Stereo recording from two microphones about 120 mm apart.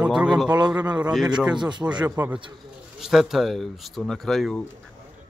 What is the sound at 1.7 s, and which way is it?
Speech, 40° right (ahead or behind).